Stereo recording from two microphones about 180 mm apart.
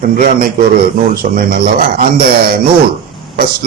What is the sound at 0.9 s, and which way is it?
A man's voice, 55° right (ahead or behind).